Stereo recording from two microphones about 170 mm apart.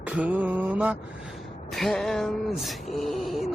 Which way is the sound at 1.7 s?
Centre (ahead or behind).